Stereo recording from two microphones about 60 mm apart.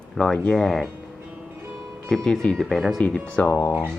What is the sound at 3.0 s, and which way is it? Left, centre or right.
Speech, centre.